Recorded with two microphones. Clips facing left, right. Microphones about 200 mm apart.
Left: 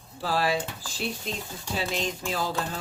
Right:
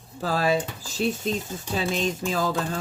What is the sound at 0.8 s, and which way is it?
Dishes, 40° right (ahead or behind).